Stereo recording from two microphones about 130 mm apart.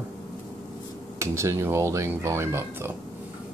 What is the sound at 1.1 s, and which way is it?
Speech, 20° right (ahead or behind).